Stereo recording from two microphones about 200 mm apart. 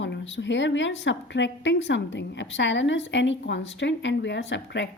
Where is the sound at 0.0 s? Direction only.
65° left (ahead or behind).